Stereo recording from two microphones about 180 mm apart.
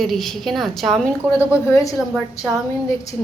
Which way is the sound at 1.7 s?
20° left (ahead or behind).